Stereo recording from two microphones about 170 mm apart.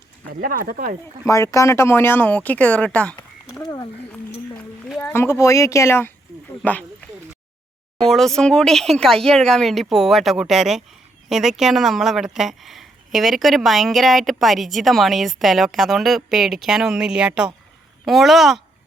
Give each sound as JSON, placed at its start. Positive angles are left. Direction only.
{"t": 0.3, "sound": "speech", "side_deg": -60}
{"t": 1.3, "sound": "speech", "side_deg": 15}
{"t": 4.5, "sound": "speech", "side_deg": 10}
{"t": 8.0, "sound": "speech", "side_deg": 0}